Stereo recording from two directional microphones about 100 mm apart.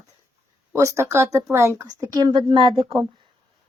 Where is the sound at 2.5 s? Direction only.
65° right (ahead or behind).